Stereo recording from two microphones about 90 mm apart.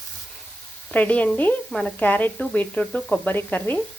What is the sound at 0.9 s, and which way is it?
Frying, 15° left (ahead or behind).